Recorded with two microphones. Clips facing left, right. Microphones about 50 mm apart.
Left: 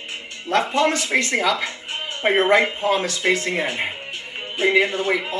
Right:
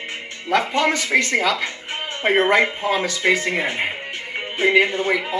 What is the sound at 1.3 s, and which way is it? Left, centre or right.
Speech, left.